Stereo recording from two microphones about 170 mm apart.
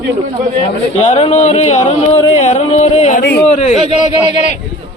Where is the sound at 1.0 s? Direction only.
40° left (ahead or behind).